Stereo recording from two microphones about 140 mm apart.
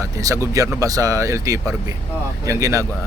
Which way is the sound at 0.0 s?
25° right (ahead or behind).